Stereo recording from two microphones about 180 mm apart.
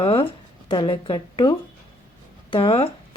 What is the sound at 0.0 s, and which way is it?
Speech, 30° left (ahead or behind).